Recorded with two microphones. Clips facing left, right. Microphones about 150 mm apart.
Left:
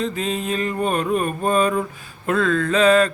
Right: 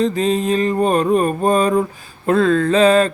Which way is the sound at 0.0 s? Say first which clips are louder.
Right 7 dB; 35° right (ahead or behind).